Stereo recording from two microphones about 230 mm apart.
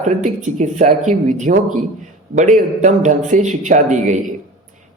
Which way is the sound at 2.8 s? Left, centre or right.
Right.